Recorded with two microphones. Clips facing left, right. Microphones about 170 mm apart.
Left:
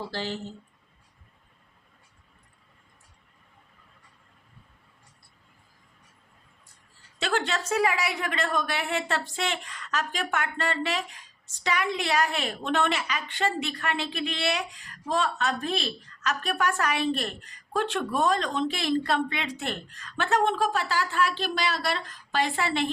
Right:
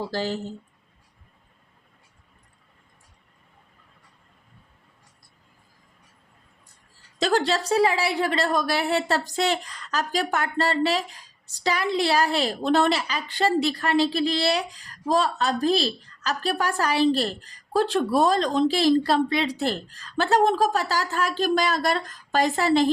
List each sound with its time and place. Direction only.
0.1 s speech: 40° right (ahead or behind)
7.2 s speech: 35° right (ahead or behind)